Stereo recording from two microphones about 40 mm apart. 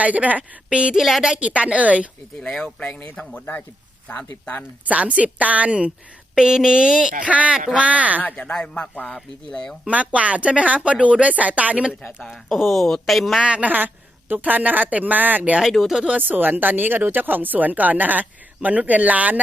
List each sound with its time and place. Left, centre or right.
0.0 s a woman's voice: right
0.9 s speech: centre
1.4 s a woman's voice: right
4.9 s a woman's voice: right
6.3 s speech: centre
7.3 s a woman's voice: right
8.6 s speech: left
9.8 s a woman's voice: right
12.0 s speech: centre
13.4 s a woman's voice: right
13.7 s a woman's voice: right
15.8 s speech: centre
16.1 s a woman's voice: right